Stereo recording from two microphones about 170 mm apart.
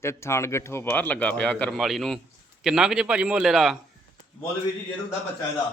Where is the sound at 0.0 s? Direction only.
15° left (ahead or behind); by 3.8 s centre (ahead or behind).